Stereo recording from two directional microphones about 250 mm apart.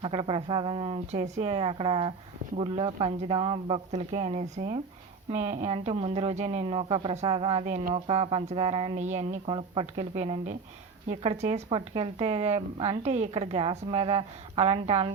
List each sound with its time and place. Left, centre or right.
0.0 s a woman's voice: right